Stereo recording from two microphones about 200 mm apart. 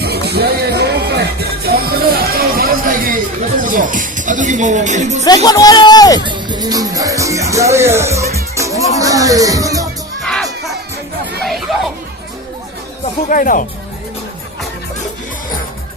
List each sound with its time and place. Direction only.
0.0 s music: 55° right (ahead or behind); by 5.2 s 35° right (ahead or behind)
5.2 s speech: 20° left (ahead or behind)
6.1 s speech: 25° right (ahead or behind)
8.5 s music: 15° right (ahead or behind)
10.2 s crowd: centre (ahead or behind)
11.4 s chatter: centre (ahead or behind)
13.2 s speech: 45° left (ahead or behind)